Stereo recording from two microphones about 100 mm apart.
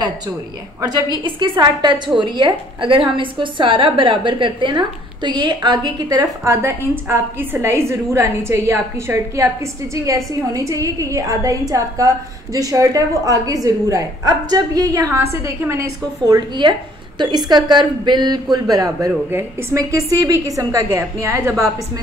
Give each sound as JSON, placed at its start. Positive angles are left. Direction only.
{"t": 0.7, "sound": "speech", "side_deg": -35}
{"t": 1.2, "sound": "a woman's voice", "side_deg": -50}
{"t": 6.5, "sound": "a woman's voice", "side_deg": -25}
{"t": 16.3, "sound": "a woman's voice", "side_deg": -50}